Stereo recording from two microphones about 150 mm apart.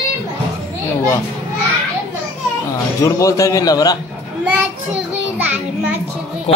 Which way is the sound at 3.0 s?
20° left (ahead or behind).